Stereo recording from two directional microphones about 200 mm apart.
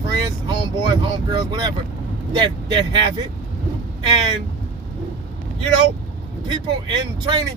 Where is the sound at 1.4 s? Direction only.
20° right (ahead or behind).